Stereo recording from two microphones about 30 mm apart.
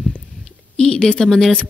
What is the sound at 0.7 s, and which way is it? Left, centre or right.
Speech, left.